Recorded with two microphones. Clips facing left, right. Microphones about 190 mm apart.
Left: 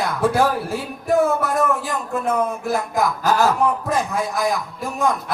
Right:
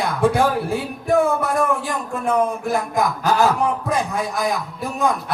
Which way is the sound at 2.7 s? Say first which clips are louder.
Even; centre (ahead or behind).